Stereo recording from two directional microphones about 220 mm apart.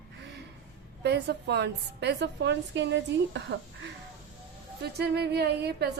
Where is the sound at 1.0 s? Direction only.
50° right (ahead or behind).